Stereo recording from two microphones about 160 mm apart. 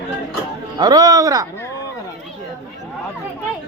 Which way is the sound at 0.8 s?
25° right (ahead or behind).